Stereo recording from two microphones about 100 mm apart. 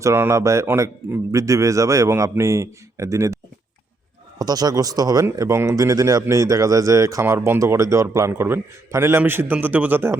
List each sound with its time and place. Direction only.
0.0 s a man's voice: 25° right (ahead or behind)
4.4 s a man's voice: 40° right (ahead or behind); by 10.2 s 20° right (ahead or behind)